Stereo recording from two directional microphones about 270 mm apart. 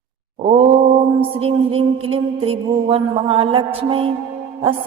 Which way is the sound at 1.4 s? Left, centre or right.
Right.